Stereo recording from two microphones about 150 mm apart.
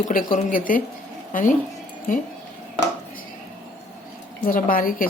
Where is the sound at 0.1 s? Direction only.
65° left (ahead or behind).